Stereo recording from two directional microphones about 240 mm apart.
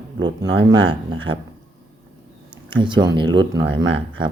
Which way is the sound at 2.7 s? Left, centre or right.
Centre.